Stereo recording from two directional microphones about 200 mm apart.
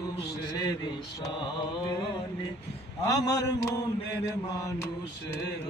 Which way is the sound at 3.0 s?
15° left (ahead or behind).